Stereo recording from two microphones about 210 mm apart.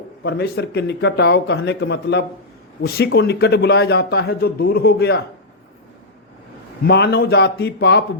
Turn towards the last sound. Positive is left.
turn(degrees=55)  # may be behind; listen again after turning